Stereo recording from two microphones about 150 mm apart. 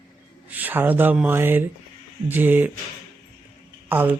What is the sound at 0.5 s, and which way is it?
Speech, 10° right (ahead or behind).